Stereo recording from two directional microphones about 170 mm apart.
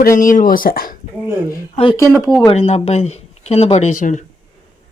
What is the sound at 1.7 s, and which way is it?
Speech, 30° left (ahead or behind).